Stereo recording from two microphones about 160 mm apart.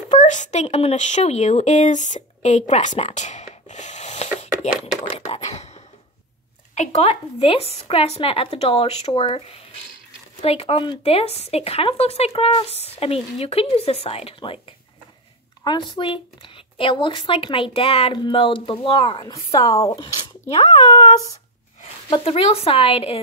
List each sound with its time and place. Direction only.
0.1 s speech: 45° left (ahead or behind)
5.1 s a sound: 45° left (ahead or behind)
6.7 s speech: 45° left (ahead or behind)
10.4 s speech: 35° left (ahead or behind)
15.6 s speech: 30° left (ahead or behind)
22.1 s speech: 35° left (ahead or behind)